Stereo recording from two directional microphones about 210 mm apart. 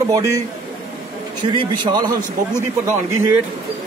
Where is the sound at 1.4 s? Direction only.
25° right (ahead or behind).